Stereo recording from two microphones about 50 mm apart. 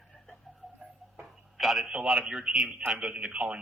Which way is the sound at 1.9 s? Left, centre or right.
Centre.